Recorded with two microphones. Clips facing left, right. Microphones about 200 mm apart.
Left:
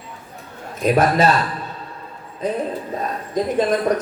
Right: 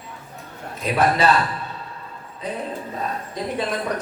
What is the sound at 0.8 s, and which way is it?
Speech, 45° left (ahead or behind).